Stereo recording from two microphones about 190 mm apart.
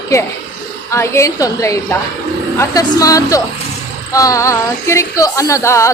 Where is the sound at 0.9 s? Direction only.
15° left (ahead or behind).